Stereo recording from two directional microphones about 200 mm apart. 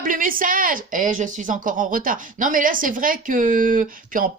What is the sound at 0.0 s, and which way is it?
Speech, 45° right (ahead or behind).